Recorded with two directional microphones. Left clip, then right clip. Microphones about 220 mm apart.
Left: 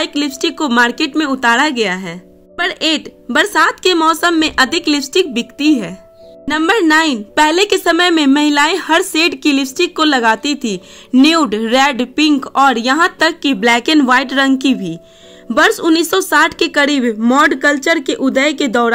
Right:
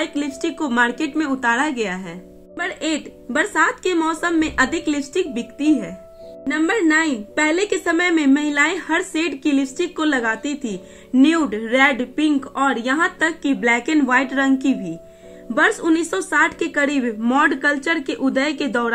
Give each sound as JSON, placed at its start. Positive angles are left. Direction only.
{"t": 0.0, "sound": "a woman's voice", "side_deg": 45}